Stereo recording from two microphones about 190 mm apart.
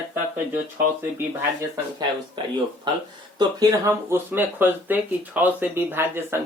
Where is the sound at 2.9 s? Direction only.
25° right (ahead or behind).